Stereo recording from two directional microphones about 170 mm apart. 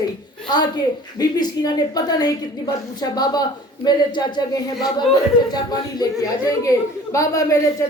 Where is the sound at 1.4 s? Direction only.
25° left (ahead or behind).